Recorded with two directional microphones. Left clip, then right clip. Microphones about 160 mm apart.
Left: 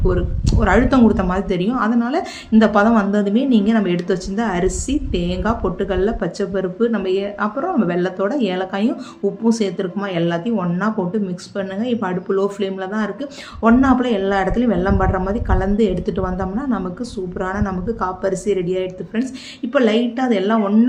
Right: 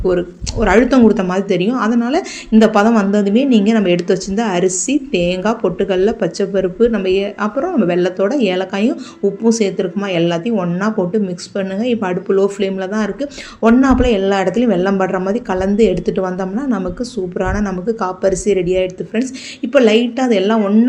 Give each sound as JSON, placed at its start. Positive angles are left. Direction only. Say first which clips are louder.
{"t": 0.0, "sound": "speech", "louder": "right 5 dB", "side_deg": -10}